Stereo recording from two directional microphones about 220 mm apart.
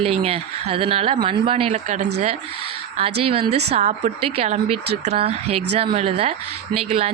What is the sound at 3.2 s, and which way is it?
Speech, 25° right (ahead or behind).